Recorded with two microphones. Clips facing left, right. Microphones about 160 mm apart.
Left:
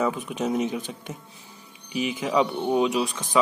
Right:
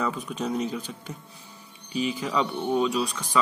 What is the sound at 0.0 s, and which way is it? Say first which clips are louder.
Speech: left 3 dB; 15° left (ahead or behind).